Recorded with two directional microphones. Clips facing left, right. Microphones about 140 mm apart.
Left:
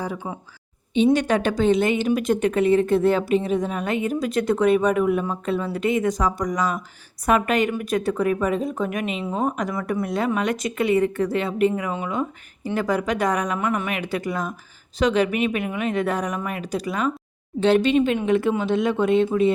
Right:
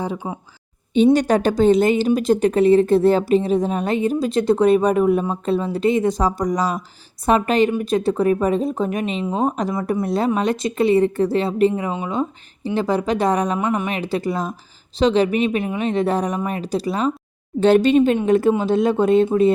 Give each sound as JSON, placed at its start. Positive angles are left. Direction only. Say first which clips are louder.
{"t": 0.2, "sound": "a woman's voice", "louder": "right 3 dB", "side_deg": -25}
{"t": 1.1, "sound": "a woman's voice", "louder": "right 4 dB", "side_deg": -40}
{"t": 17.6, "sound": "speech", "louder": "right 4 dB", "side_deg": -40}